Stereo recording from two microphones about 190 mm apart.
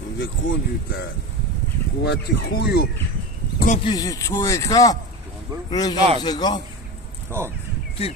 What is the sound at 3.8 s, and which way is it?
Speech, 20° left (ahead or behind).